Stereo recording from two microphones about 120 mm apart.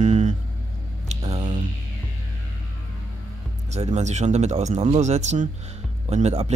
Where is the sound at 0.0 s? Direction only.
90° right.